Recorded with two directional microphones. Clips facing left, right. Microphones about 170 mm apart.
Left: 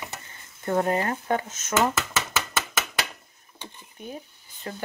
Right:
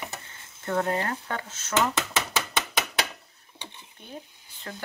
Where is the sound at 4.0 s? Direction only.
10° left (ahead or behind).